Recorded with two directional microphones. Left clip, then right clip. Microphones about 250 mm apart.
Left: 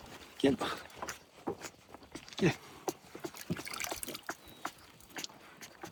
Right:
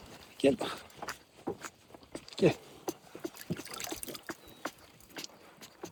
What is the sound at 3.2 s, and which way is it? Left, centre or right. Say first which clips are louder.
Rowboat: even; centre.